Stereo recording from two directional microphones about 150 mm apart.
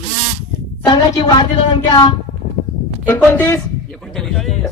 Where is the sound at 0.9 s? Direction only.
30° left (ahead or behind).